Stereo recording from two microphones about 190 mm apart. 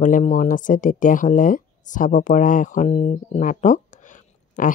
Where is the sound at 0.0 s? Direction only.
40° left (ahead or behind).